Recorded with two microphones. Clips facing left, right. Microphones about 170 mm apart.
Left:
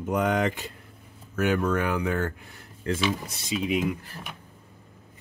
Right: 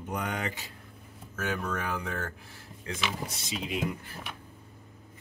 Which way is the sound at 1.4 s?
70° left (ahead or behind).